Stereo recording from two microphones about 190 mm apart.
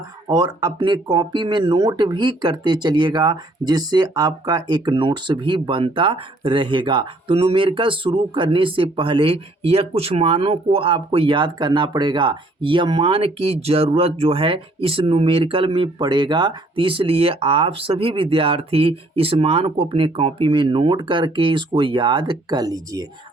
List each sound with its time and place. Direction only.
0.3 s speech: 20° right (ahead or behind)